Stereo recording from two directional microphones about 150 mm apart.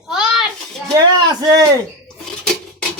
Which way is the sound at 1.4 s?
25° right (ahead or behind).